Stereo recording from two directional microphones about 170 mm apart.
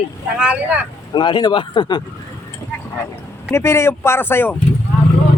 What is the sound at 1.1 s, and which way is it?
Speech, 25° left (ahead or behind).